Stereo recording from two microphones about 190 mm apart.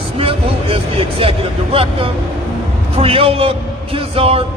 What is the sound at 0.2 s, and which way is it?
Speech, 30° right (ahead or behind).